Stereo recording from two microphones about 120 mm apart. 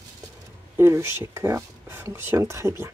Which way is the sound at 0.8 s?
20° right (ahead or behind).